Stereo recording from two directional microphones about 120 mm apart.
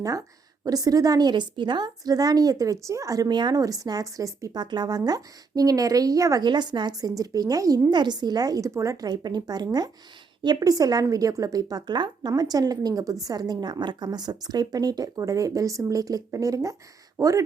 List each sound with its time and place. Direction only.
0.0 s a woman's voice: 30° right (ahead or behind)